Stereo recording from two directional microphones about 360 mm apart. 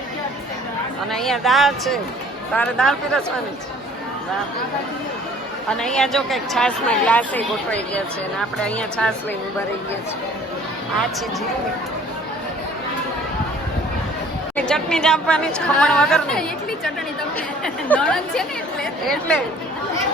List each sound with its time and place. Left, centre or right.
1.1 s speech: centre
5.7 s speech: centre
14.5 s speech: centre